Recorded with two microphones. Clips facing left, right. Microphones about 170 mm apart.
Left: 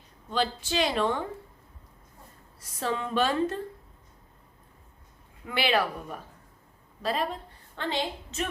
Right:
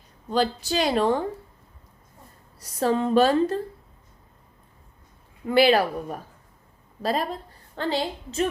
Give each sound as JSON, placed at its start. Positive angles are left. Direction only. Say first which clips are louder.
{"t": 0.3, "sound": "a woman's voice", "louder": "right 5 dB", "side_deg": -40}
{"t": 2.6, "sound": "a woman's voice", "louder": "right 8 dB", "side_deg": -40}
{"t": 5.5, "sound": "a woman's voice", "louder": "right 8 dB", "side_deg": -40}